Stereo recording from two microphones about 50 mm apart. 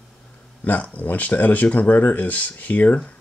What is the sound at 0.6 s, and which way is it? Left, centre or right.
Speech, left.